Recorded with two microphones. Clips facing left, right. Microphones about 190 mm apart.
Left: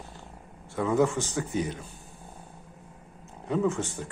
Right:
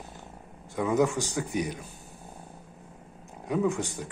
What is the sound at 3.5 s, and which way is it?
Speech, 15° right (ahead or behind).